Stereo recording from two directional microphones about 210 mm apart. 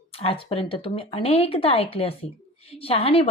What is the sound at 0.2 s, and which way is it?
A woman's voice, 30° left (ahead or behind).